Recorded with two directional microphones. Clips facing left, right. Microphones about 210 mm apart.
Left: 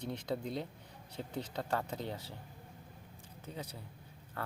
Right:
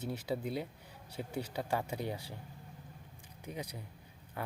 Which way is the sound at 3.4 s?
15° right (ahead or behind).